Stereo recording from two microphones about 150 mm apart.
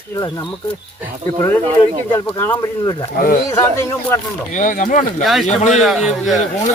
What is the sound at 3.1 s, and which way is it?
Speech, 70° left (ahead or behind).